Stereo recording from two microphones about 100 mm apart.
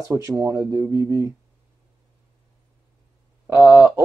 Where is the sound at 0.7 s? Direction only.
30° right (ahead or behind).